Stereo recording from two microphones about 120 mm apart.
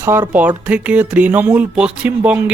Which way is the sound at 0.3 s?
10° right (ahead or behind).